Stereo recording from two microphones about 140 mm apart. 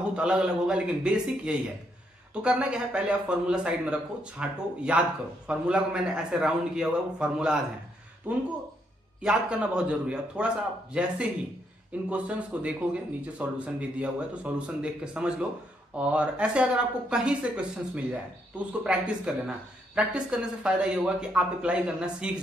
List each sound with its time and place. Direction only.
0.0 s a man's voice: 5° right (ahead or behind)